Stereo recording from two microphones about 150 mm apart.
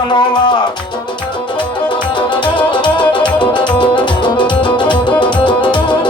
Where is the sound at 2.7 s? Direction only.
30° left (ahead or behind).